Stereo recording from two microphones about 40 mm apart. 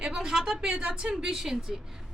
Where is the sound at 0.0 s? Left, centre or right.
Centre.